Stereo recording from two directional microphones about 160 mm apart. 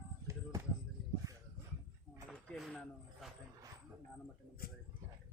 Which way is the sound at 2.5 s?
Centre (ahead or behind).